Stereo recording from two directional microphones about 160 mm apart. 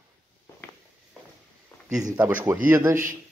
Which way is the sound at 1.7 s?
10° left (ahead or behind).